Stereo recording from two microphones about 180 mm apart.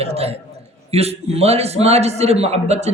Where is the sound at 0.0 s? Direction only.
35° right (ahead or behind).